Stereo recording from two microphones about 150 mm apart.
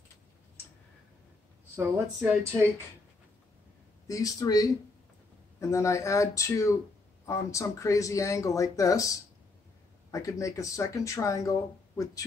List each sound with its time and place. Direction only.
1.8 s speech: 15° right (ahead or behind)
4.1 s speech: 25° left (ahead or behind)